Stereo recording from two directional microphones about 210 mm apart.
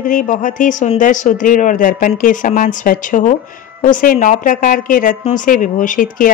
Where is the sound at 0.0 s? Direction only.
40° left (ahead or behind).